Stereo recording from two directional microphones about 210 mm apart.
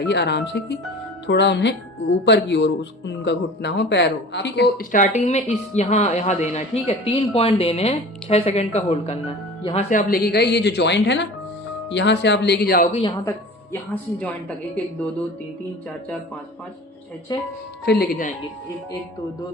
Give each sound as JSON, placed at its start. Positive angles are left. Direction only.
{"t": 0.1, "sound": "speech", "side_deg": 55}
{"t": 9.9, "sound": "speech", "side_deg": 45}
{"t": 12.8, "sound": "a woman's voice", "side_deg": 25}
{"t": 13.9, "sound": "a woman's voice", "side_deg": 5}
{"t": 17.3, "sound": "a woman's voice", "side_deg": 20}
{"t": 17.8, "sound": "speech", "side_deg": 45}